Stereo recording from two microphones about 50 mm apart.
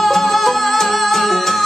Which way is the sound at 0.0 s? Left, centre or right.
Centre.